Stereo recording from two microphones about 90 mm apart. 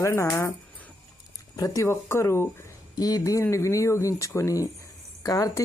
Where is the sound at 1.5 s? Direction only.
40° left (ahead or behind).